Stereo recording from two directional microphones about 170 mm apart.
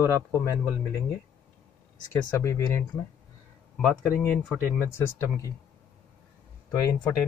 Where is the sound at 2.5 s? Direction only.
15° left (ahead or behind).